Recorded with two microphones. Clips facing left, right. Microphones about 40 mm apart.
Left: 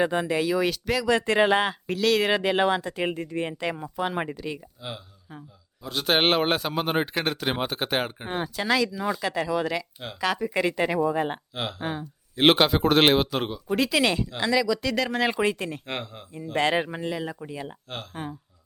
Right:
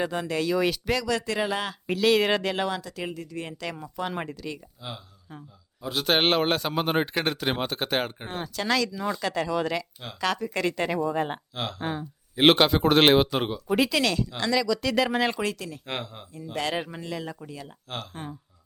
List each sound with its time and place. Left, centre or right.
0.0 s speech: centre
1.0 s speech: left
1.9 s a man's voice: centre
2.3 s speech: centre
5.8 s a man's voice: centre
14.0 s speech: left; by 15.2 s centre
15.4 s speech: left
15.9 s a man's voice: centre
16.3 s speech: left
18.1 s speech: centre